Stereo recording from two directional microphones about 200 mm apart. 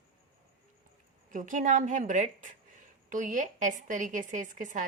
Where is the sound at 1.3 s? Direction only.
40° right (ahead or behind).